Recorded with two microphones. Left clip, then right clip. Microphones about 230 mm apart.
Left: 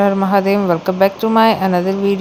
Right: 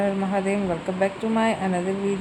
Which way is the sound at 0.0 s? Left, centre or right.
Left.